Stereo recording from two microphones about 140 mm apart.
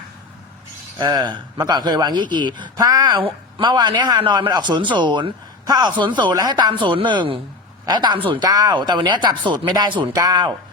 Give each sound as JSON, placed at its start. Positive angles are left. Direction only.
{"t": 0.9, "sound": "speech", "side_deg": -30}